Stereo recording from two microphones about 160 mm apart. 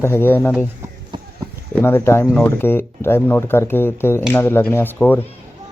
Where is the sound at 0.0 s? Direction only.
15° left (ahead or behind).